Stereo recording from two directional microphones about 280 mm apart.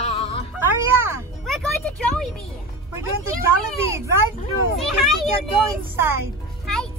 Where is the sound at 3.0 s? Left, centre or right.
Centre.